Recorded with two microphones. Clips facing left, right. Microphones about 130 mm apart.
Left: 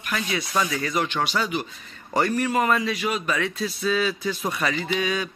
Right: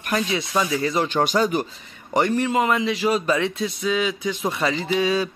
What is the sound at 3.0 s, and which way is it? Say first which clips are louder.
Speech: right 5 dB; 30° right (ahead or behind).